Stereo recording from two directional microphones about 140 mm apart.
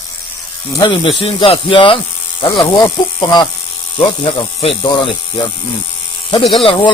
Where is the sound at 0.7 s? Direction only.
30° left (ahead or behind).